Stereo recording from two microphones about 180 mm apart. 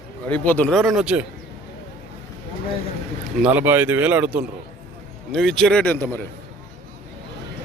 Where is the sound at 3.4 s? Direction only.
10° right (ahead or behind).